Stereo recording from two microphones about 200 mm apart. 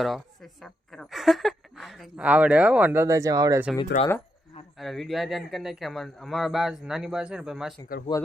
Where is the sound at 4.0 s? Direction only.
40° left (ahead or behind).